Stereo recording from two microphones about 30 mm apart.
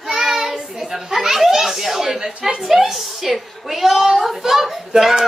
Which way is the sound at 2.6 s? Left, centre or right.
Centre.